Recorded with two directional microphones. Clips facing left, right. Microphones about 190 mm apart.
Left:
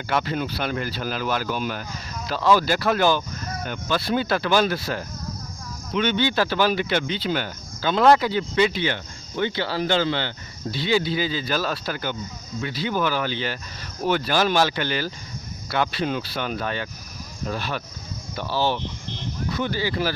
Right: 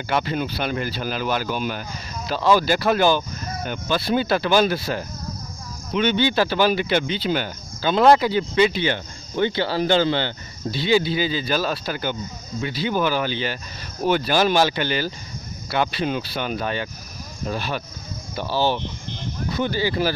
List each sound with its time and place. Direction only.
0.1 s speech: 15° right (ahead or behind)
1.4 s speech: 10° right (ahead or behind)
2.2 s speech: 25° right (ahead or behind)